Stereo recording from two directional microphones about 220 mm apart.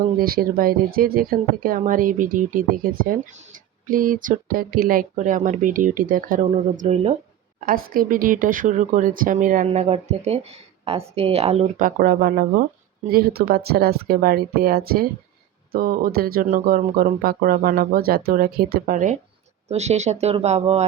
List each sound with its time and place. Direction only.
0.2 s speech: 40° right (ahead or behind)
7.6 s speech: 40° right (ahead or behind)